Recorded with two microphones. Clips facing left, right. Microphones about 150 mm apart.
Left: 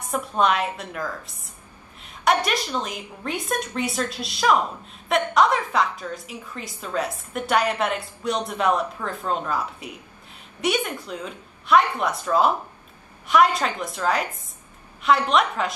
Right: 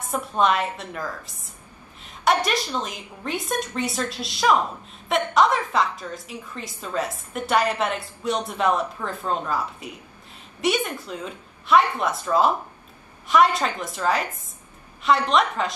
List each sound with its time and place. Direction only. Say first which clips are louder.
0.1 s a woman's voice: even; centre (ahead or behind)